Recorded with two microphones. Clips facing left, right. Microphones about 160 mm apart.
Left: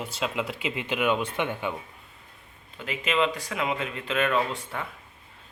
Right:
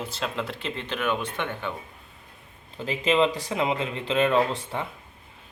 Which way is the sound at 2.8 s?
30° right (ahead or behind).